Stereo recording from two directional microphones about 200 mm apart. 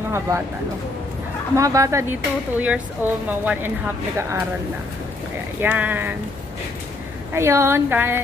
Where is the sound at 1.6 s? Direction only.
15° right (ahead or behind).